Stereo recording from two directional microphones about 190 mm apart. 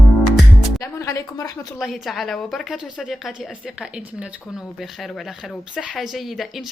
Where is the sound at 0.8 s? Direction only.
15° left (ahead or behind).